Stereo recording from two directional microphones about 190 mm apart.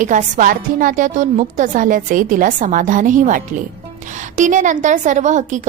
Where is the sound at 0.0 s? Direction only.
40° right (ahead or behind).